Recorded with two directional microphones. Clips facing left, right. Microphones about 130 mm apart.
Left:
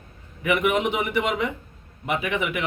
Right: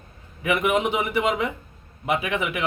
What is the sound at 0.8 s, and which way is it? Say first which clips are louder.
Speech: right 1 dB; 5° right (ahead or behind).